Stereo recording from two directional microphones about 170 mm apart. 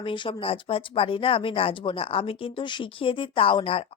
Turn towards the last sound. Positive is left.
turn(degrees=30)  # may be behind; listen again after turning